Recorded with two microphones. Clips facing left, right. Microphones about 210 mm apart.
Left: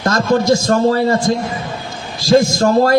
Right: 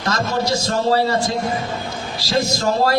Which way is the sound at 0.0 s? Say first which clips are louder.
Left 7 dB; 50° left (ahead or behind).